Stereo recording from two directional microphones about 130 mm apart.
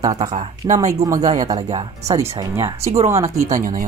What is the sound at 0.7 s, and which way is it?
Speech, 75° right (ahead or behind).